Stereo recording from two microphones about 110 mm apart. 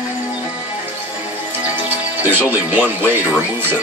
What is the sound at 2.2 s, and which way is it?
Speech, 15° right (ahead or behind).